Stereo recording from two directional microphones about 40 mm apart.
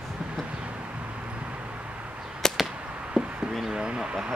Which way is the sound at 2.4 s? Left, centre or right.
Centre.